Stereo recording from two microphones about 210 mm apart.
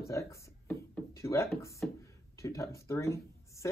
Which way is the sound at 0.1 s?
15° left (ahead or behind).